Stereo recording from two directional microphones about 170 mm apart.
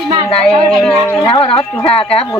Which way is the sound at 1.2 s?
35° left (ahead or behind).